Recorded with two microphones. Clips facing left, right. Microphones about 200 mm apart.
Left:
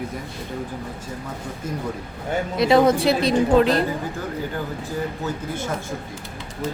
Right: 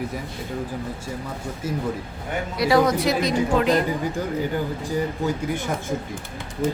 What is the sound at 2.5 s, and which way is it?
Speech, 25° left (ahead or behind).